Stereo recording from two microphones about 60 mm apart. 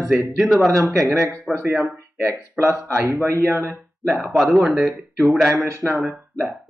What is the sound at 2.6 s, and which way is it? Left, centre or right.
Speech, right.